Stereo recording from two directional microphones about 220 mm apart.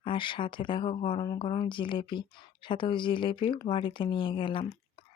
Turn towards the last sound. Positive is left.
turn(degrees=25)  # may be behind; listen again after turning